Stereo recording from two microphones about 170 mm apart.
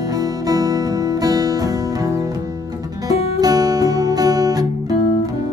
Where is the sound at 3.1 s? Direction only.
35° left (ahead or behind).